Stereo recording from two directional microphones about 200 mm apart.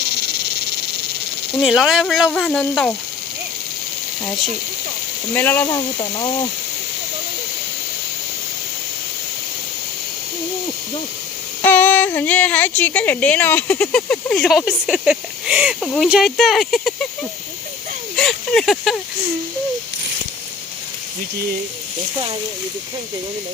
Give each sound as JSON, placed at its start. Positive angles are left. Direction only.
{"t": 1.6, "sound": "speech", "side_deg": 0}
{"t": 5.3, "sound": "speech", "side_deg": 10}
{"t": 11.6, "sound": "speech", "side_deg": 10}
{"t": 18.2, "sound": "speech", "side_deg": 0}